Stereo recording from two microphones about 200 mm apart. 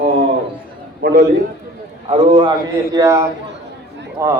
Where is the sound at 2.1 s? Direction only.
25° right (ahead or behind).